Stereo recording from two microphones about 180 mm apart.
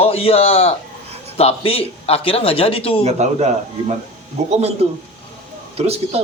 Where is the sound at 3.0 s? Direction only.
40° right (ahead or behind).